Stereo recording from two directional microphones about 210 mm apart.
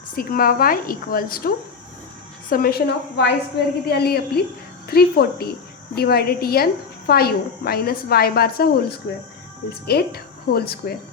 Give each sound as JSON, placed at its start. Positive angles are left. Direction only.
{"t": 0.2, "sound": "a woman's voice", "side_deg": 45}